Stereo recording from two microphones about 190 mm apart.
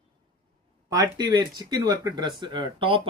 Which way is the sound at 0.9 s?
20° right (ahead or behind).